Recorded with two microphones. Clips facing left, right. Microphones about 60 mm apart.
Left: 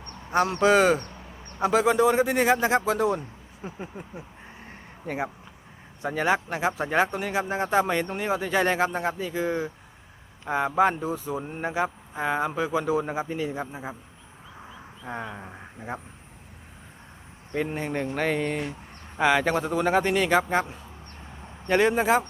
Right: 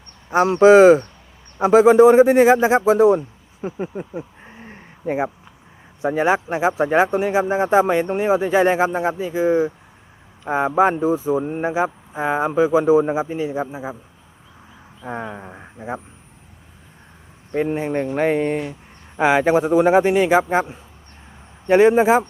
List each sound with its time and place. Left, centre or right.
0.4 s speech: right
4.2 s a sound: right
6.0 s speech: centre
15.0 s speech: centre
17.5 s speech: centre